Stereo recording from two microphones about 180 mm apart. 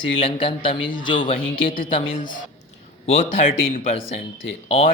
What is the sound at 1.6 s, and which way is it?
Speech, 50° left (ahead or behind).